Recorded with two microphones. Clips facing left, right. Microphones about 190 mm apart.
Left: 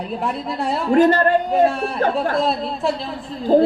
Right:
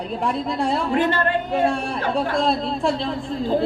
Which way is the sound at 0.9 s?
40° left (ahead or behind).